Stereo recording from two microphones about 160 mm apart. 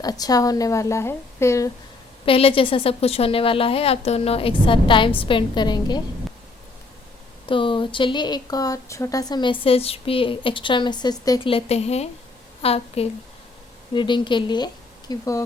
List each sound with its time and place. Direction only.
0.0 s a woman's voice: 25° left (ahead or behind)
2.2 s a woman's voice: 35° left (ahead or behind)
7.4 s a woman's voice: 30° left (ahead or behind)